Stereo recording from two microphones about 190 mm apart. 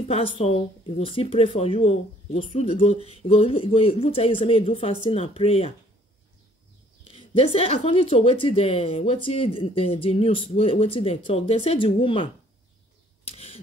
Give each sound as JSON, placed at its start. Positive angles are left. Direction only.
{"t": 0.1, "sound": "speech", "side_deg": 30}
{"t": 7.1, "sound": "speech", "side_deg": 30}
{"t": 13.2, "sound": "bird", "side_deg": 30}